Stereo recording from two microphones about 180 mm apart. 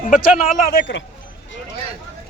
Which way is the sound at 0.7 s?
90° left.